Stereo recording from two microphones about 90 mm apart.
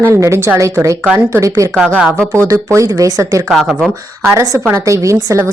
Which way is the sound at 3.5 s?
Centre (ahead or behind).